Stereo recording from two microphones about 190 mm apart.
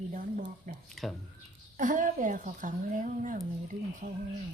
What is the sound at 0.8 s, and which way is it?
Speech, centre (ahead or behind).